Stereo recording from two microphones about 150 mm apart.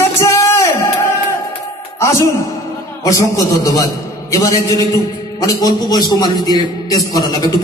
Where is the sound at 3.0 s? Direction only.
20° left (ahead or behind).